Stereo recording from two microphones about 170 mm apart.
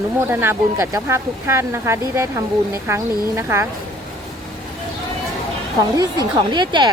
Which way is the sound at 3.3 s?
15° right (ahead or behind).